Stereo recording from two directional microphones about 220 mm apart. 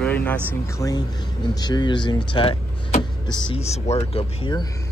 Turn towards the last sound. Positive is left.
turn(degrees=20)  # may be behind; listen again after turning